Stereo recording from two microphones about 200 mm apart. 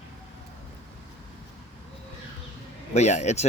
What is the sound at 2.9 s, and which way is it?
Speech, 35° left (ahead or behind).